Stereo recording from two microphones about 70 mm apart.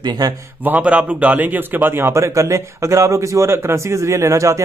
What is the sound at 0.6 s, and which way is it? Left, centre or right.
A man's voice, centre.